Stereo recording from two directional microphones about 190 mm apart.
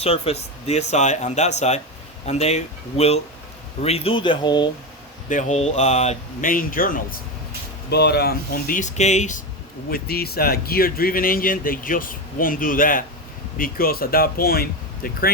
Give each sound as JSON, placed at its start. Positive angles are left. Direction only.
{"t": 0.0, "sound": "speech", "side_deg": 30}
{"t": 5.3, "sound": "speech", "side_deg": 40}
{"t": 7.9, "sound": "speech", "side_deg": 60}
{"t": 9.9, "sound": "speech", "side_deg": 55}